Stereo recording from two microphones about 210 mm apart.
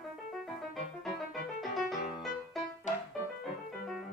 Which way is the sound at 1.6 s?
Centre (ahead or behind).